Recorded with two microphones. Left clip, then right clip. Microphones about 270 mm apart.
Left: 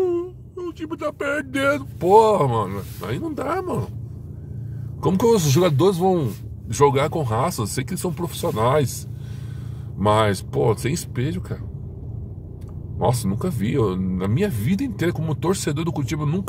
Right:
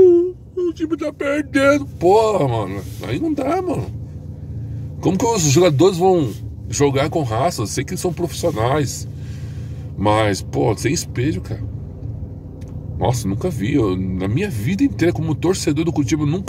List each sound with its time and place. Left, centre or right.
0.2 s speech: centre
5.0 s speech: centre
10.0 s speech: centre
13.0 s speech: centre